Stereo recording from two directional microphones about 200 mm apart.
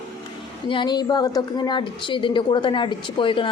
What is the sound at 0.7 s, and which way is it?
A woman's voice, 20° left (ahead or behind).